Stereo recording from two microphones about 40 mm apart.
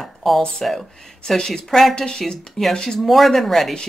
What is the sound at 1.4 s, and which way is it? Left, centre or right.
Speech, centre.